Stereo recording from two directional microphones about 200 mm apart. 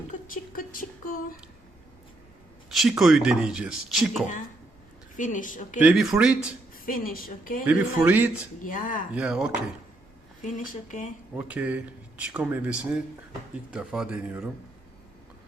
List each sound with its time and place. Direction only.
0.5 s a sound: 45° left (ahead or behind)
2.6 s speech: centre (ahead or behind)
5.1 s speech: 40° left (ahead or behind)
5.8 s speech: 5° right (ahead or behind)
6.7 s a woman's voice: 45° left (ahead or behind)
7.7 s speech: 10° right (ahead or behind)
8.6 s speech: 40° left (ahead or behind)
9.1 s speech: 5° right (ahead or behind)
10.4 s speech: 40° left (ahead or behind)
11.3 s speech: 5° right (ahead or behind)